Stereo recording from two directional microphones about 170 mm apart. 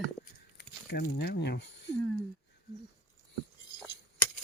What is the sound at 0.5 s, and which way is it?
Speech, 70° left (ahead or behind).